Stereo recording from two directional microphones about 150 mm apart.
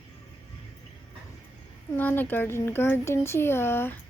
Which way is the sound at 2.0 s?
10° left (ahead or behind).